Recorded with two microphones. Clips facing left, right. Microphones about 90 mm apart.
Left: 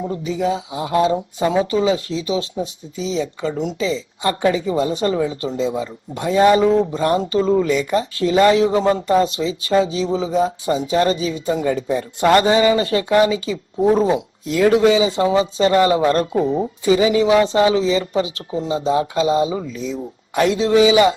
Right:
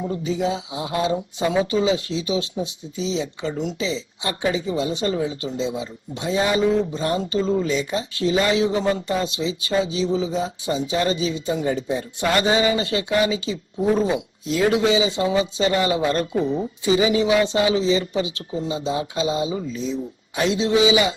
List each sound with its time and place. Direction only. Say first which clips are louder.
0.3 s speech: left 3 dB; 40° left (ahead or behind)
14.4 s speech: left 4 dB; 55° left (ahead or behind)
14.7 s speech: left 6 dB; 40° left (ahead or behind)
19.7 s speech: left 1 dB; 35° right (ahead or behind)
20.3 s speech: left 5 dB; 50° left (ahead or behind)